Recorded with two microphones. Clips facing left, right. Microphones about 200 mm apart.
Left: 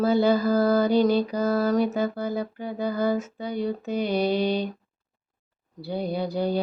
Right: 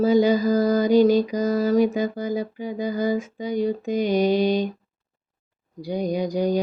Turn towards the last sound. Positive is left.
turn(degrees=-15)  # may be behind; listen again after turning